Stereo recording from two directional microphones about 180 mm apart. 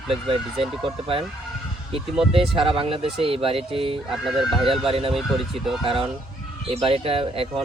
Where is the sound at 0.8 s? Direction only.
30° right (ahead or behind).